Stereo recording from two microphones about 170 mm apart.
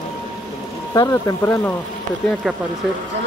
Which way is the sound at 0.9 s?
20° left (ahead or behind).